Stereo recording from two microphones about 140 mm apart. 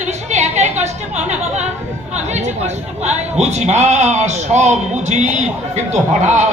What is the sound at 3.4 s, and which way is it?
Speech, 50° right (ahead or behind).